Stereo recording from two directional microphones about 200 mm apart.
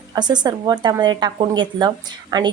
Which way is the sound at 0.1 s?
20° right (ahead or behind).